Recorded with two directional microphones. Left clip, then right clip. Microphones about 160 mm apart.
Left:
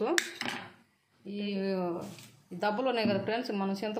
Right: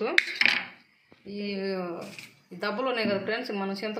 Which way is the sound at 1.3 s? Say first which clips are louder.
Right 2 dB; 55° left (ahead or behind).